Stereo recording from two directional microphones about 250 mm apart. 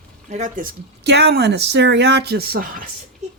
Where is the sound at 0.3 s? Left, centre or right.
Right.